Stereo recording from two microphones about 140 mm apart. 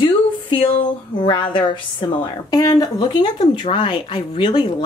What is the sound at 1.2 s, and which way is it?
A woman's voice, 35° left (ahead or behind).